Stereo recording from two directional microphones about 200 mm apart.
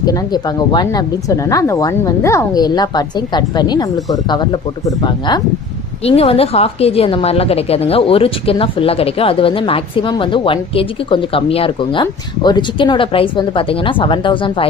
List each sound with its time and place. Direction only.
0.0 s a woman's voice: 20° left (ahead or behind)